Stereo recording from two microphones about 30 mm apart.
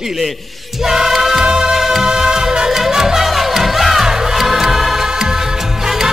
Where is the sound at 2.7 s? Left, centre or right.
Centre.